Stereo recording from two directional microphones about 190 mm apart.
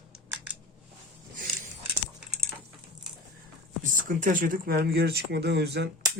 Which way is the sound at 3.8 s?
45° right (ahead or behind).